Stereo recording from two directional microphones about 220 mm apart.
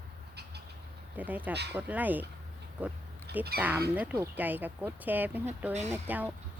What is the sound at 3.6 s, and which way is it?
A woman's voice, 5° right (ahead or behind).